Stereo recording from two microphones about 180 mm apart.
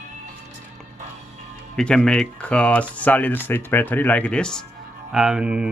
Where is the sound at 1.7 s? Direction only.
5° left (ahead or behind).